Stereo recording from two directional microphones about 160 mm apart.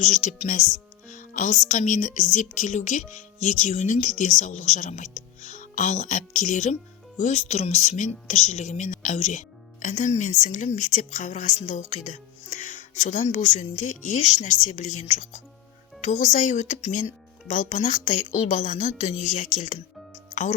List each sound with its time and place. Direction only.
0.0 s a woman's voice: 50° left (ahead or behind)
1.0 s music: 55° left (ahead or behind)
2.3 s a woman's voice: 50° left (ahead or behind)